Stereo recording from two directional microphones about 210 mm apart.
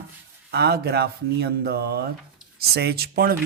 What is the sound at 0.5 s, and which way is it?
A man's voice, 50° right (ahead or behind).